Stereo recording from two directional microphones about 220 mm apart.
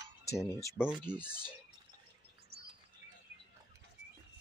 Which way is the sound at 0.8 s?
5° right (ahead or behind).